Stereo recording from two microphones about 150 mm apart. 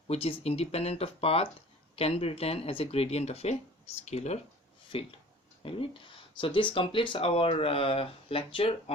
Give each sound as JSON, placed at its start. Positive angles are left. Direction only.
{"t": 0.1, "sound": "speech", "side_deg": 40}